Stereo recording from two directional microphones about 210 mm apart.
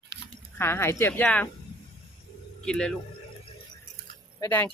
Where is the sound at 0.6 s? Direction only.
10° left (ahead or behind).